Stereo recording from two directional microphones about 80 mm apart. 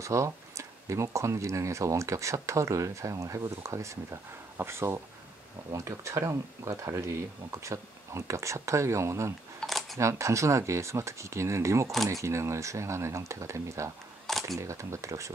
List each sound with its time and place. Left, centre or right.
0.0 s speech: right
9.6 s camera: centre
9.9 s speech: right
14.3 s camera: centre
14.6 s speech: right